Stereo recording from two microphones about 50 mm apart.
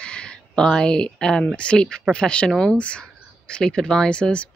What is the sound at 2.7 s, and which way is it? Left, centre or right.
Speech, left.